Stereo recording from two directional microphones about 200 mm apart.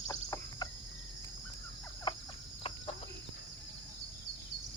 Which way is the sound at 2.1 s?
25° left (ahead or behind).